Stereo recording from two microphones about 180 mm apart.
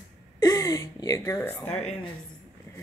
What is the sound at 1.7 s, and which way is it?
Speech, 35° left (ahead or behind).